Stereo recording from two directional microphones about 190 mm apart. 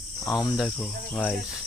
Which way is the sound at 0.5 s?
Centre (ahead or behind).